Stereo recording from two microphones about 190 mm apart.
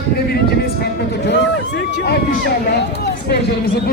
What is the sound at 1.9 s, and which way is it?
Speech, 55° left (ahead or behind).